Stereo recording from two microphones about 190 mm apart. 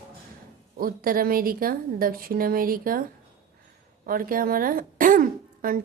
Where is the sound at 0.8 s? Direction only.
50° right (ahead or behind).